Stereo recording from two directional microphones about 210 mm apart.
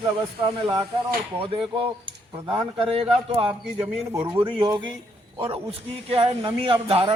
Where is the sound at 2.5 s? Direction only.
25° right (ahead or behind).